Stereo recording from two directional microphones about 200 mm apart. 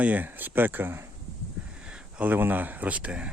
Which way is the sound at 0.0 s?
10° right (ahead or behind).